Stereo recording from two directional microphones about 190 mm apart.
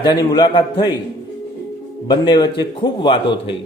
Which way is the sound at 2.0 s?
25° left (ahead or behind).